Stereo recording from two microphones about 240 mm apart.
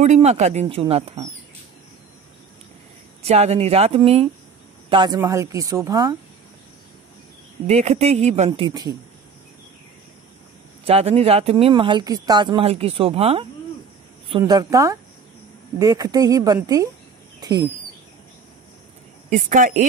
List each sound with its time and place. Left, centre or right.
0.0 s speech: right
3.2 s speech: right
7.6 s speech: right
8.5 s speech: centre
10.9 s speech: right
14.4 s speech: centre
17.4 s bird: centre
19.3 s speech: right